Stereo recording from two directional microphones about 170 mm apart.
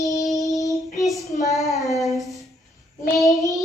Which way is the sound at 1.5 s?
Centre (ahead or behind).